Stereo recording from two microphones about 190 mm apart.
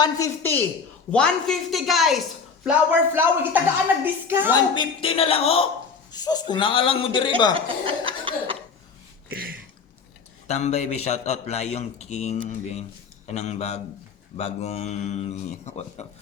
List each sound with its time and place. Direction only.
0.0 s a woman's voice: 15° left (ahead or behind)
1.1 s a woman's voice: 5° left (ahead or behind)
2.6 s speech: 10° right (ahead or behind)
4.5 s a man's voice: 25° left (ahead or behind)
6.1 s a man's voice: 20° left (ahead or behind)
7.5 s speech: 30° right (ahead or behind)
9.3 s a sound: 50° right (ahead or behind)
10.4 s a man's voice: 35° left (ahead or behind)